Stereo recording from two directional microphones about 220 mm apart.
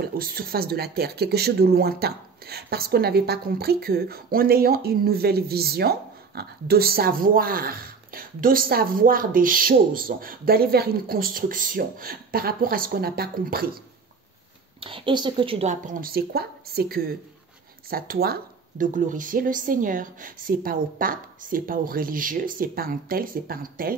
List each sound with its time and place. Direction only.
0.0 s speech: 40° right (ahead or behind)
14.8 s speech: 25° right (ahead or behind); by 24.0 s 40° right (ahead or behind)